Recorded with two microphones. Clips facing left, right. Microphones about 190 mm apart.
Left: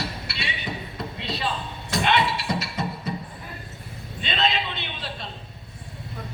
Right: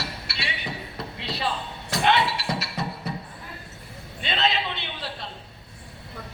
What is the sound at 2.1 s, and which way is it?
Music, 20° left (ahead or behind).